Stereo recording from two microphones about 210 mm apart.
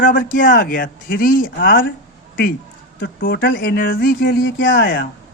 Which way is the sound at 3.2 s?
45° left (ahead or behind).